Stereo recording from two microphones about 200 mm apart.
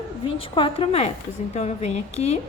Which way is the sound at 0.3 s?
25° left (ahead or behind).